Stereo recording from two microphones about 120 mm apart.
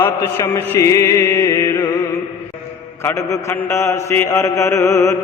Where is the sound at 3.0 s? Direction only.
25° left (ahead or behind).